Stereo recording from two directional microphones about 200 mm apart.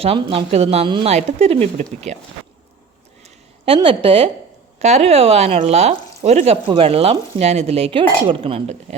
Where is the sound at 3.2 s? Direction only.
30° right (ahead or behind).